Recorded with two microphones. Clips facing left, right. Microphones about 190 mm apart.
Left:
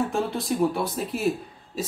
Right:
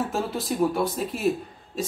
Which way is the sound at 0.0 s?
Centre (ahead or behind).